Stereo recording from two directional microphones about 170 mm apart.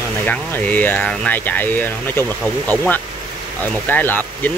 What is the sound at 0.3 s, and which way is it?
Speech, 10° left (ahead or behind).